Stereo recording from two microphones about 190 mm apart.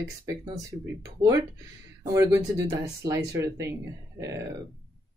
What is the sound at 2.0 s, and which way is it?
Speech, 15° right (ahead or behind).